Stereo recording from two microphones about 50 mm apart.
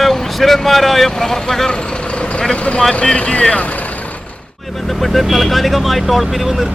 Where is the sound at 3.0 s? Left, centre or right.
Centre.